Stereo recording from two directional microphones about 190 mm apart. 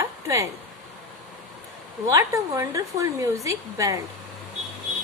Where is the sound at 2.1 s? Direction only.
15° right (ahead or behind).